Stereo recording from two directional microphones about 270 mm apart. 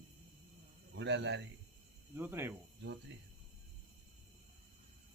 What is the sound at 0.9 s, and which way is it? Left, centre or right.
Speech, right.